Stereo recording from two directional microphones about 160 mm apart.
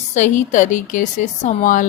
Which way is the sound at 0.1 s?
50° left (ahead or behind).